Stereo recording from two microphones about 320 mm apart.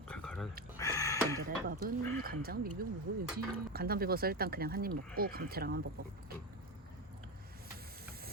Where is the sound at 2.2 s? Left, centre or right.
Right.